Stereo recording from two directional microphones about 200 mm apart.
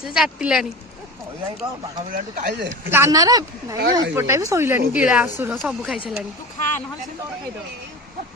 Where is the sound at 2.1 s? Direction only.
40° right (ahead or behind).